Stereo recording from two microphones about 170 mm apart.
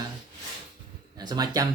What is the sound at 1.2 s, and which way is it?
Speech, 25° right (ahead or behind).